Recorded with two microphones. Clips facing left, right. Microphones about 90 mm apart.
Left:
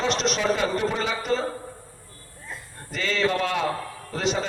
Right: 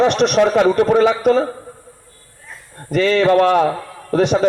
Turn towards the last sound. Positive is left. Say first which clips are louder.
# right 10 dB
turn(degrees=-60)  # may be behind; listen again after turning